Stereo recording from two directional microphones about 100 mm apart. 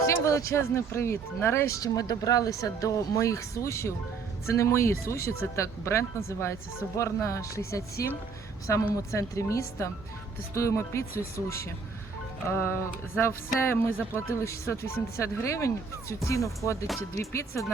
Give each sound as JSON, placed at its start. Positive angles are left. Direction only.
{"t": 0.0, "sound": "speech", "side_deg": 30}